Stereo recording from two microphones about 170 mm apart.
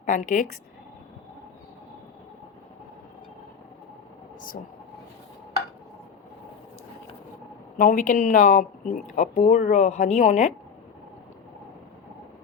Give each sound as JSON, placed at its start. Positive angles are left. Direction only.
{"t": 0.0, "sound": "speech", "side_deg": 50}
{"t": 7.8, "sound": "speech", "side_deg": 50}